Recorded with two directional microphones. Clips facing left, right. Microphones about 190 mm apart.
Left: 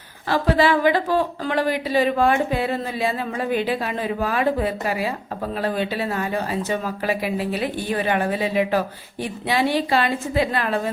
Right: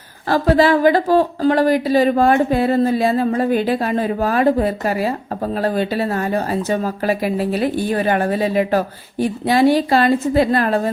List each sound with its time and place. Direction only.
0.3 s a woman's voice: 40° right (ahead or behind)